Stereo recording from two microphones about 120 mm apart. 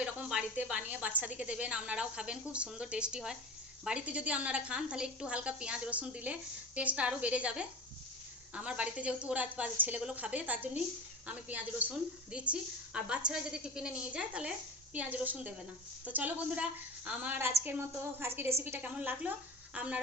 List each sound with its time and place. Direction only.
0.0 s a woman's voice: 5° right (ahead or behind)